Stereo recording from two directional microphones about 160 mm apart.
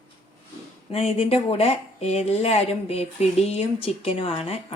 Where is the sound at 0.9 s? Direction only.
40° left (ahead or behind).